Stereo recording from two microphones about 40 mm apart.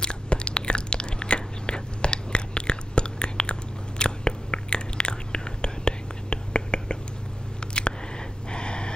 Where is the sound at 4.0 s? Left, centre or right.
Left.